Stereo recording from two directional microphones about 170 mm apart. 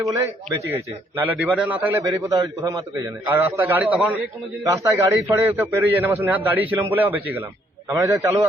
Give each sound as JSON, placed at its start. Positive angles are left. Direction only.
{"t": 0.7, "sound": "a man's voice", "side_deg": -10}
{"t": 2.0, "sound": "a man's voice", "side_deg": -20}